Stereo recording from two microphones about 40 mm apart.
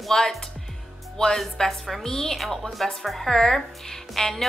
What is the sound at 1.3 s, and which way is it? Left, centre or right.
A woman's voice, centre.